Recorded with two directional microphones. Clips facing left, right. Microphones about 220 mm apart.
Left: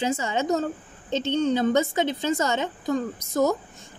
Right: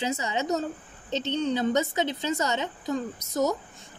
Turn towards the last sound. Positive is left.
turn(degrees=50)  # may be behind; listen again after turning